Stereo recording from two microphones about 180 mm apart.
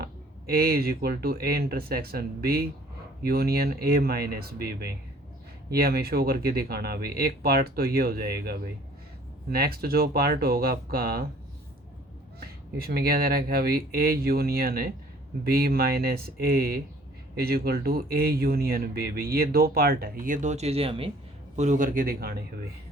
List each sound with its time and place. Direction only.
0.0 s speech: 55° right (ahead or behind)
12.4 s speech: 60° right (ahead or behind); by 21.1 s 30° right (ahead or behind)
21.5 s a man's voice: 40° right (ahead or behind); by 22.4 s 60° right (ahead or behind)